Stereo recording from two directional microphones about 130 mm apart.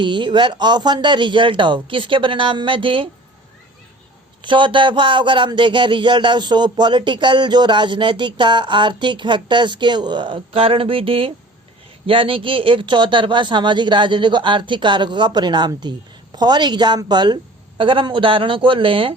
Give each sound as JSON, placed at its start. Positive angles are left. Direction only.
{"t": 0.0, "sound": "speech", "side_deg": -40}
{"t": 4.4, "sound": "speech", "side_deg": -40}